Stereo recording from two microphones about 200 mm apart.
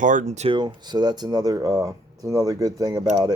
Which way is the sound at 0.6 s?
20° right (ahead or behind).